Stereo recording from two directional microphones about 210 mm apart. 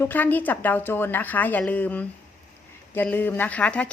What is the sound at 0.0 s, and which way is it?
A woman's voice, 10° left (ahead or behind).